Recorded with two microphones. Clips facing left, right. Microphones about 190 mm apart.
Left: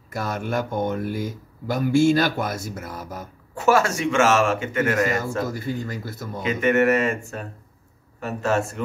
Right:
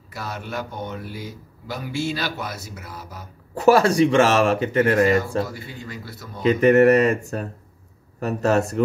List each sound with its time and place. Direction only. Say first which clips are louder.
0.1 s speech: left 5 dB; 50° left (ahead or behind)
3.5 s speech: right 4 dB; 35° right (ahead or behind)
5.5 s speech: left 7 dB; 45° left (ahead or behind)
6.4 s speech: right 5 dB; 35° right (ahead or behind)